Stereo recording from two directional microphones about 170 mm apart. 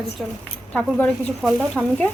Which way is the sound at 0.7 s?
5° left (ahead or behind).